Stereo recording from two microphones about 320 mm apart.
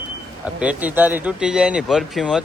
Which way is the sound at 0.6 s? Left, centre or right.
Centre.